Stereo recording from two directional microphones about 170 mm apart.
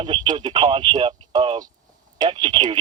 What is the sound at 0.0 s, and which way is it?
Speech, 25° right (ahead or behind).